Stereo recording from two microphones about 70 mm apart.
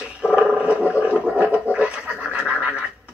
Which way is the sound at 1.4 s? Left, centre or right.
Centre.